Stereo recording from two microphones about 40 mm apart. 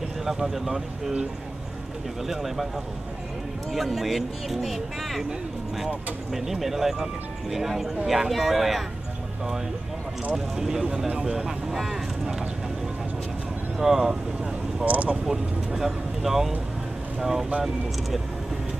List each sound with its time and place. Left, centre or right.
0.2 s speech: centre
2.2 s speech: centre
3.7 s speech: centre
6.3 s speech: centre
10.3 s speech: centre
13.7 s speech: centre
14.9 s speech: right
15.2 s speech: centre